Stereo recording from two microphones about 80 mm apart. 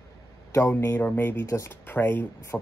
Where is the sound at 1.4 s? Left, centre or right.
Left.